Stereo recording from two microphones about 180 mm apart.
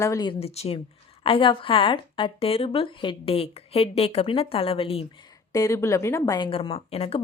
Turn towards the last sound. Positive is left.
turn(degrees=35)  # may be behind; listen again after turning